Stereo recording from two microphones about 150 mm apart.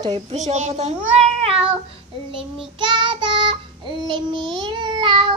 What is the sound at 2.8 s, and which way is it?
Child singing, 30° right (ahead or behind).